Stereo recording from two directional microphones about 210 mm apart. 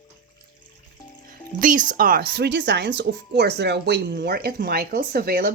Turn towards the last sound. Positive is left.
turn(degrees=-50)  # may be behind; listen again after turning